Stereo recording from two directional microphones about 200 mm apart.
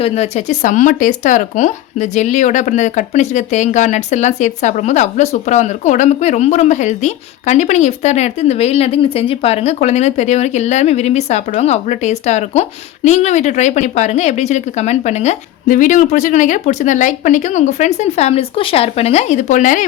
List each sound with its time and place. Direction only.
0.0 s speech: 30° left (ahead or behind)